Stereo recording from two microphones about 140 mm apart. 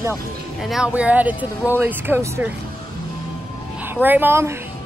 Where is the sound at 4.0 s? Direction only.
15° right (ahead or behind).